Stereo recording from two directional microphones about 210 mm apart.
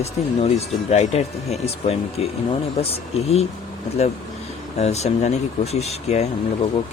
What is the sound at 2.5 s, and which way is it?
Speech, 30° left (ahead or behind).